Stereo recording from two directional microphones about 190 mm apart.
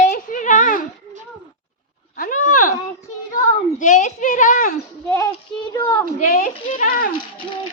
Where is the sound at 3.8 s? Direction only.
40° left (ahead or behind).